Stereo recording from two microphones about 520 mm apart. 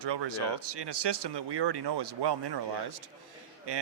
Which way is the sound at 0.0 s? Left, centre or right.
Right.